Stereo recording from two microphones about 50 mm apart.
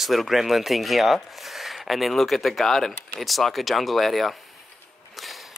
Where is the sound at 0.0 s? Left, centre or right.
Centre.